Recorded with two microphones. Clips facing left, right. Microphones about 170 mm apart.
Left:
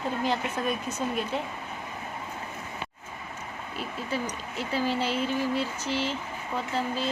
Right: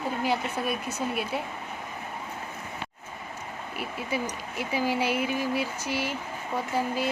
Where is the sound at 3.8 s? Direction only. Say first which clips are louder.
Right 1 dB; 10° right (ahead or behind).